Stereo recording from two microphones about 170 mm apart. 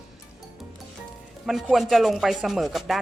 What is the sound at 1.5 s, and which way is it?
Rub, centre (ahead or behind).